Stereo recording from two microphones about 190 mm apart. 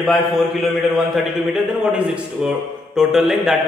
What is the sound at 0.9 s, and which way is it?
A man's voice, centre (ahead or behind).